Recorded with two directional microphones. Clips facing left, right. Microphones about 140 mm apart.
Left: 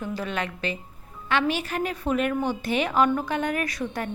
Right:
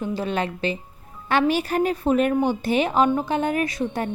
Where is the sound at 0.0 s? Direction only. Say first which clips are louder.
Right 5 dB; 25° right (ahead or behind).